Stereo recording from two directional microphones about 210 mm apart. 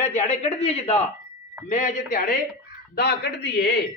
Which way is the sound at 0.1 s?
30° left (ahead or behind).